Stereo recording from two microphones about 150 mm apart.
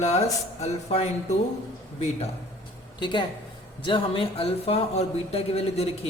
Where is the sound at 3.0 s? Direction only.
30° left (ahead or behind).